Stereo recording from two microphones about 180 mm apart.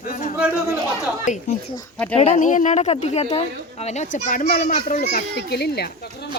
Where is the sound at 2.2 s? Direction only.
40° left (ahead or behind).